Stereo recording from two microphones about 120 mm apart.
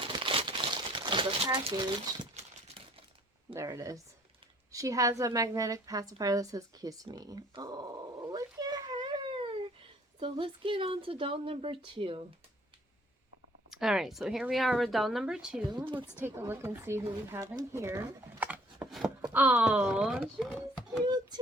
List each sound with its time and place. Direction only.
0.0 s crumpling: 45° right (ahead or behind)
1.7 s speech: 35° right (ahead or behind)
3.5 s a woman's voice: 25° right (ahead or behind)
8.3 s a sound: 30° right (ahead or behind)
10.2 s speech: 45° right (ahead or behind)
13.7 s speech: 5° right (ahead or behind)
16.1 s speech: 20° right (ahead or behind)
18.9 s a sound: centre (ahead or behind)
19.3 s speech: 15° right (ahead or behind)